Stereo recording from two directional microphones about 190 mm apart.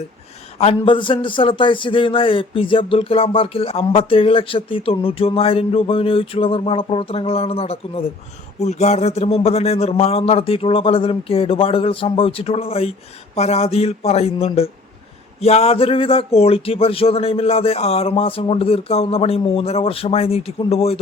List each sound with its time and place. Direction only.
0.6 s a man's voice: 30° left (ahead or behind)